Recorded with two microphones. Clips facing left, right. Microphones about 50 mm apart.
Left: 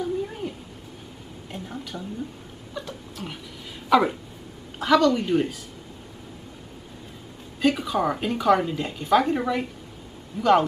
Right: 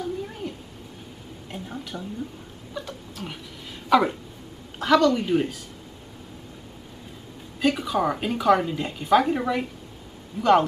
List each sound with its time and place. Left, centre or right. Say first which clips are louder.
0.0 s a sound: left 3 dB; centre
3.9 s a woman's voice: even; centre
7.6 s a woman's voice: even; centre